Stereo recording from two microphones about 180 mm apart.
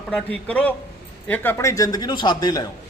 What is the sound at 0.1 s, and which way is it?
A man's voice, 10° left (ahead or behind).